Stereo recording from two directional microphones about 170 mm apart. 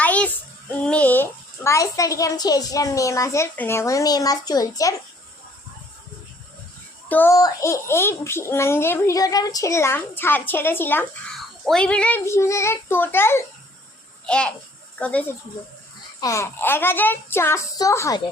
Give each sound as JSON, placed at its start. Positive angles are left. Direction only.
{"t": 0.0, "sound": "child singing", "side_deg": 10}
{"t": 0.7, "sound": "a child's voice", "side_deg": 10}
{"t": 7.1, "sound": "a child's voice", "side_deg": 15}